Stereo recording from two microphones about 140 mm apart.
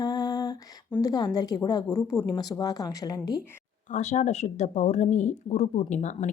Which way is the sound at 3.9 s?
55° left (ahead or behind).